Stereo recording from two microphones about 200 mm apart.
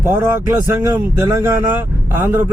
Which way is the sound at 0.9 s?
15° right (ahead or behind).